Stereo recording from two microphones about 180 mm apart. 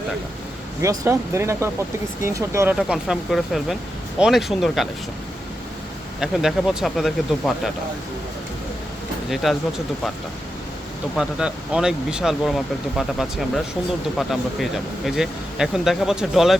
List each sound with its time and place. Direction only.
0.8 s speech: 15° right (ahead or behind)
2.7 s speech: centre (ahead or behind)
6.1 s speech: centre (ahead or behind)
9.3 s speech: centre (ahead or behind)
11.2 s speech: 5° right (ahead or behind)